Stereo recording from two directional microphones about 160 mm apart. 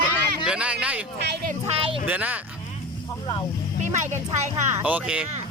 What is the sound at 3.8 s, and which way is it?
Speech, 50° right (ahead or behind).